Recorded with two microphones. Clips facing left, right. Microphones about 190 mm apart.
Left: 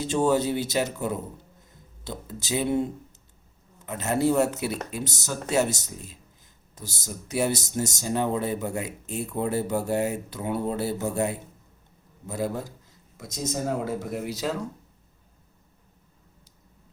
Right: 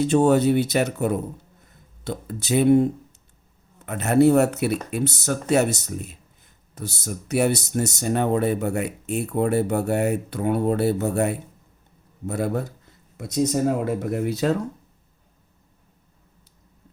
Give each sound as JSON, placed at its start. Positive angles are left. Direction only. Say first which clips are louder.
{"t": 0.1, "sound": "speech", "louder": "right 4 dB", "side_deg": -60}